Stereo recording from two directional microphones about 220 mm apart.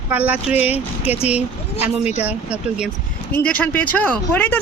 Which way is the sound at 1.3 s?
5° right (ahead or behind).